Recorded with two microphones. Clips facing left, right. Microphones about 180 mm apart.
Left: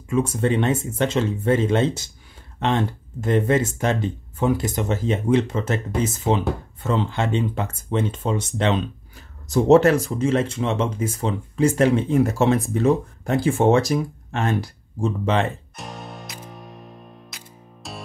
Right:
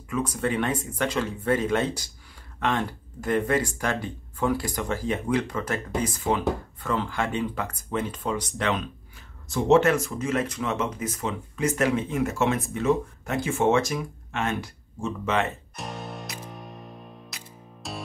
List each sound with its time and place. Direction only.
0.1 s speech: 25° left (ahead or behind)
9.5 s speech: 40° left (ahead or behind)
15.7 s music: centre (ahead or behind)